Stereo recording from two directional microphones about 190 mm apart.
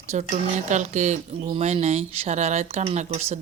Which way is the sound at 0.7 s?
40° right (ahead or behind).